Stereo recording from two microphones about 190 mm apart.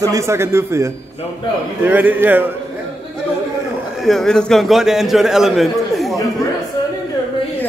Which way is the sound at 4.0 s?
Centre (ahead or behind).